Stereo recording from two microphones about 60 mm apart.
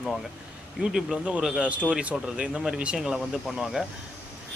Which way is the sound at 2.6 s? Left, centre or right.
Centre.